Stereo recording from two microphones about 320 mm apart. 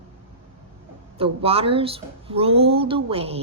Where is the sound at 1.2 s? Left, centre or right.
Centre.